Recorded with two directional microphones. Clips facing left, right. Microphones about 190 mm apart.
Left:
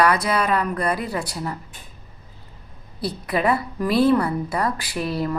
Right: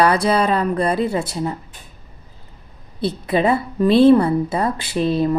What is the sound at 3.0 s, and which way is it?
A woman's voice, 25° right (ahead or behind).